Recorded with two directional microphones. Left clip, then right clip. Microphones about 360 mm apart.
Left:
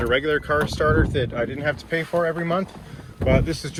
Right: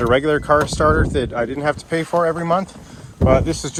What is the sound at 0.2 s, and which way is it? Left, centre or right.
Speech, centre.